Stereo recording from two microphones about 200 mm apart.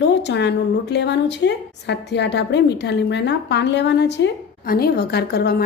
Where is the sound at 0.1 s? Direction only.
60° left (ahead or behind).